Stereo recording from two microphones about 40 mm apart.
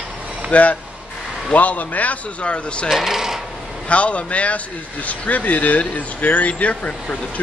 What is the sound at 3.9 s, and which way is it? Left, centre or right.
Speech, left.